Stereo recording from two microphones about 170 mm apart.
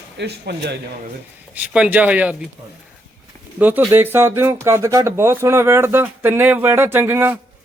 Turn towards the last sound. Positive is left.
turn(degrees=-15)  # may be behind; listen again after turning